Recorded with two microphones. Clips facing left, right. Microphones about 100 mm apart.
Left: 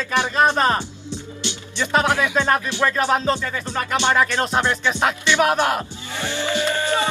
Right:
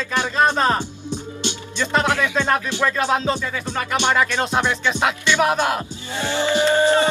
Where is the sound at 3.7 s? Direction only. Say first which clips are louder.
Even; 15° right (ahead or behind).